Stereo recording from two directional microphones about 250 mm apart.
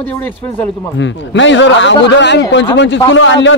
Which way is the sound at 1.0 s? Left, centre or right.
Left.